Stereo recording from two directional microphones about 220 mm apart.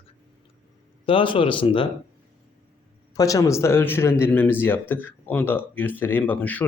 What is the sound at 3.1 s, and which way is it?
Speech, 15° left (ahead or behind).